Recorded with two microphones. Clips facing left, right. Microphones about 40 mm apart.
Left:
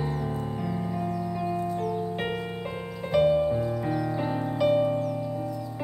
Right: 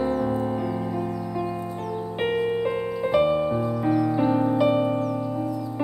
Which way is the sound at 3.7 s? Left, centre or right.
Centre.